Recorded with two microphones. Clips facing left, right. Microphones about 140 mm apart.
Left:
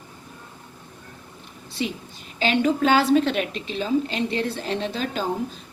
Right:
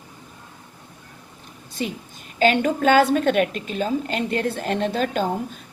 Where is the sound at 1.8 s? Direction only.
45° right (ahead or behind).